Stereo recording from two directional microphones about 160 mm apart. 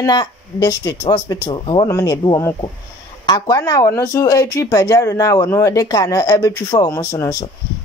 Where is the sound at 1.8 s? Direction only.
20° left (ahead or behind).